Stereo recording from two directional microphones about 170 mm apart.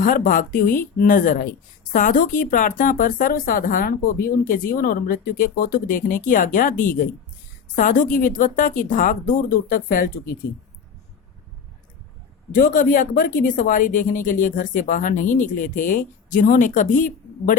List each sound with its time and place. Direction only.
0.0 s speech: 55° left (ahead or behind)
12.5 s speech: 55° left (ahead or behind)